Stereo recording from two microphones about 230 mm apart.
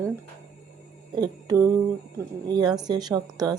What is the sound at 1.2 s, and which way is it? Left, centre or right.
A woman's voice, centre.